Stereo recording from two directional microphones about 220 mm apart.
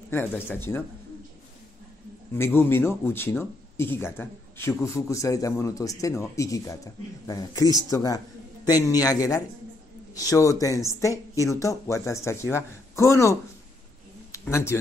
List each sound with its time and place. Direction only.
0.1 s speech: 10° left (ahead or behind)
2.3 s speech: 10° left (ahead or behind)
14.3 s a sound: 10° left (ahead or behind)